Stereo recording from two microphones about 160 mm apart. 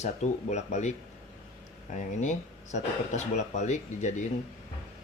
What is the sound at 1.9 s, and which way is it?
Speech, 45° left (ahead or behind).